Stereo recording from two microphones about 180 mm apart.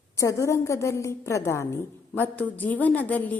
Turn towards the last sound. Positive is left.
turn(degrees=10)  # may be behind; listen again after turning